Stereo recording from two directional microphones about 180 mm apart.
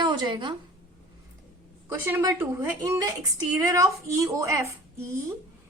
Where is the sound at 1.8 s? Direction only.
10° right (ahead or behind).